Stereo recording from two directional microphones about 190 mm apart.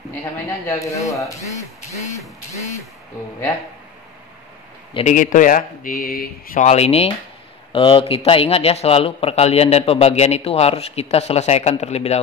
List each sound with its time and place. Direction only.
0.1 s a man's voice: 15° left (ahead or behind)
4.9 s a man's voice: 40° left (ahead or behind)
6.7 s a man's voice: 35° left (ahead or behind)